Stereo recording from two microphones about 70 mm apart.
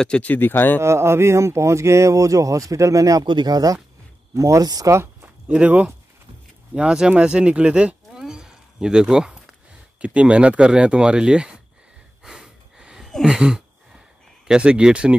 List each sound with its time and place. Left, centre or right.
0.0 s speech: centre
0.3 s speech: left
0.7 s speech: right
4.9 s a sound: right
6.7 s speech: centre
12.2 s a sound: centre
14.5 s speech: centre